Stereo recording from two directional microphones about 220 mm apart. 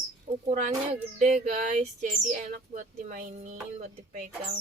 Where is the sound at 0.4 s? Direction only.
35° right (ahead or behind).